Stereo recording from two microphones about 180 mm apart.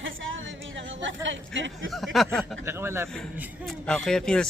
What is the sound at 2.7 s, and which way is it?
Speech, 15° right (ahead or behind).